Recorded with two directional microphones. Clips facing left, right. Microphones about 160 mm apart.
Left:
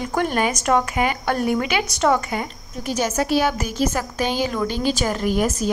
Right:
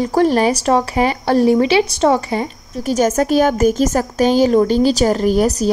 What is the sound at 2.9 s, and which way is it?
Speech, 45° right (ahead or behind).